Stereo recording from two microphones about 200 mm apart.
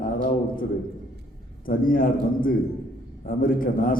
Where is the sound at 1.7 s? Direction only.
45° left (ahead or behind).